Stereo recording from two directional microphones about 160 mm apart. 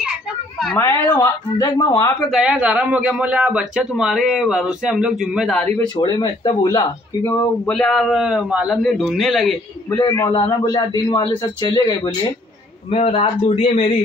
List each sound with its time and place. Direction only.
0.7 s speech: 15° left (ahead or behind)
2.3 s a man's voice: 5° right (ahead or behind)
5.8 s speech: 25° left (ahead or behind)
7.2 s a man's voice: 10° left (ahead or behind)
9.8 s speech: 20° left (ahead or behind)
12.9 s a man's voice: 40° left (ahead or behind)